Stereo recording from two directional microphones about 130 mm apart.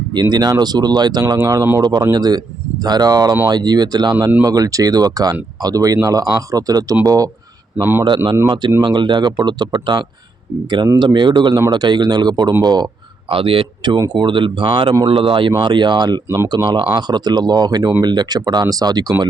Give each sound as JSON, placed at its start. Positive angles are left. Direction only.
{"t": 0.1, "sound": "a man's voice", "side_deg": -35}
{"t": 8.0, "sound": "speech", "side_deg": -35}